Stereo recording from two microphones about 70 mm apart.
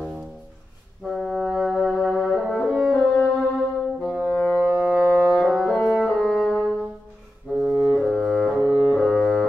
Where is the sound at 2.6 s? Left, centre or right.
Centre.